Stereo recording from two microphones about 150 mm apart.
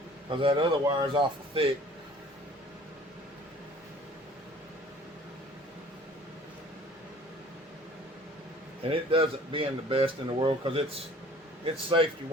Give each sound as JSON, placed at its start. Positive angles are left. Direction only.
{"t": 0.3, "sound": "speech", "side_deg": -35}
{"t": 8.8, "sound": "speech", "side_deg": -35}